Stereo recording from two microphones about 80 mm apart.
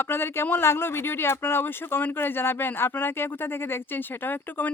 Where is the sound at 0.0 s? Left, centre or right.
Left.